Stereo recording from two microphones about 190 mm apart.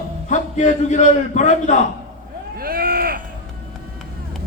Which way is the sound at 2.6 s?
50° right (ahead or behind).